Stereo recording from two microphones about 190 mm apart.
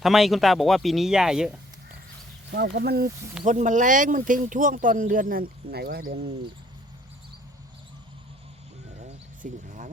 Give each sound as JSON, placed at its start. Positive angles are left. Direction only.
{"t": 0.0, "sound": "speech", "side_deg": 0}
{"t": 2.5, "sound": "speech", "side_deg": -60}
{"t": 3.4, "sound": "speech", "side_deg": -40}
{"t": 9.4, "sound": "speech", "side_deg": -40}